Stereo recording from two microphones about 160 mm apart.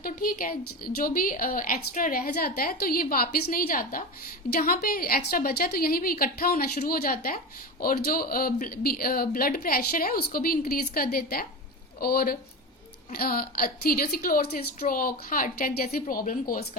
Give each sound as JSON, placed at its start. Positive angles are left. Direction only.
{"t": 0.0, "sound": "a woman's voice", "side_deg": 65}
{"t": 4.4, "sound": "a woman's voice", "side_deg": 70}